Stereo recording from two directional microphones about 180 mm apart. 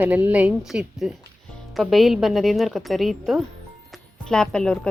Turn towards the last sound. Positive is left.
turn(degrees=5)  # may be behind; listen again after turning